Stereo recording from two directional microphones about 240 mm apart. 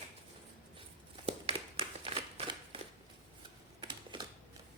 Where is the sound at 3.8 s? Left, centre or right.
Centre.